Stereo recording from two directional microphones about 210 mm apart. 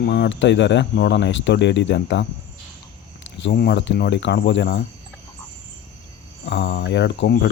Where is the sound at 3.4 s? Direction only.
55° left (ahead or behind).